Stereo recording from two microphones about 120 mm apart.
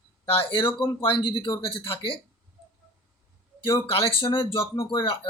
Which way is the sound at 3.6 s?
50° left (ahead or behind).